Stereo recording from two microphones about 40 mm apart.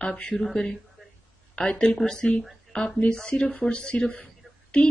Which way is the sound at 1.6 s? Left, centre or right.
Left.